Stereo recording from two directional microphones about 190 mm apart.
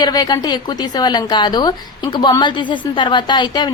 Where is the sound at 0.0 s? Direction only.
20° left (ahead or behind).